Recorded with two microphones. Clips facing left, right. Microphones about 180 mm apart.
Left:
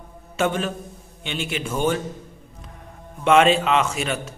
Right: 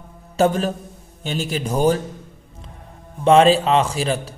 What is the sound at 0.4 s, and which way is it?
A man's voice, 40° right (ahead or behind).